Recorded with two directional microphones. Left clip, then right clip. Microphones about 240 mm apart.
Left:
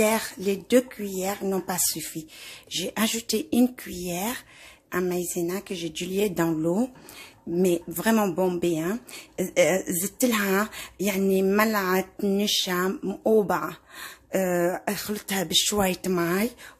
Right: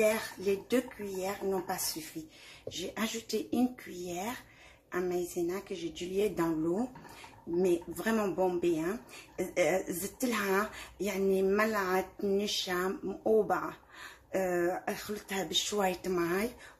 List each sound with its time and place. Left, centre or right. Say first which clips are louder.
0.0 s speech: left 5 dB; left
7.5 s speech: left 5 dB; left